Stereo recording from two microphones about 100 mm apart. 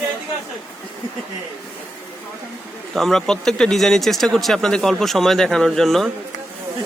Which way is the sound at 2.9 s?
5° left (ahead or behind).